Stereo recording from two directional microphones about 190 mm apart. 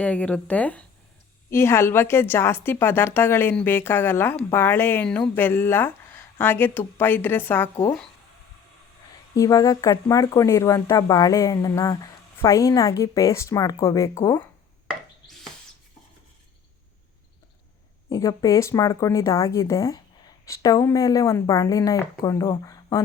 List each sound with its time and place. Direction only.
0.0 s a woman's voice: 5° left (ahead or behind)
9.3 s a woman's voice: 15° left (ahead or behind)
18.1 s a woman's voice: 15° left (ahead or behind)